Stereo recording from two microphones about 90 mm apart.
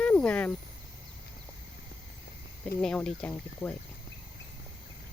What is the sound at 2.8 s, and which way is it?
Speech, 5° left (ahead or behind).